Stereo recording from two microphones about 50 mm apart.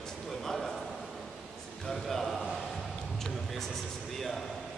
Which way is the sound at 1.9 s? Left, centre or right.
Centre.